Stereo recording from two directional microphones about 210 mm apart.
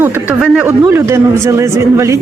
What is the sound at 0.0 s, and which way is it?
Speech, 10° right (ahead or behind).